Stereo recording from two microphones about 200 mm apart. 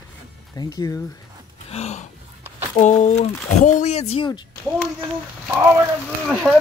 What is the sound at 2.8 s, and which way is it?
Speech, 35° left (ahead or behind).